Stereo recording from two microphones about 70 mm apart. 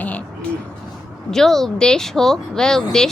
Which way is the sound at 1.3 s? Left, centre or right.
Centre.